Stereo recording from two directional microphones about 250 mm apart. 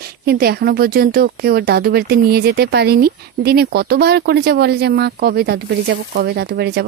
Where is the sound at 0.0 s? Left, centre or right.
Right.